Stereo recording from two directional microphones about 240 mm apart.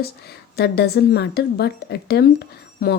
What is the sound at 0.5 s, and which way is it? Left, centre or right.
Speech, left.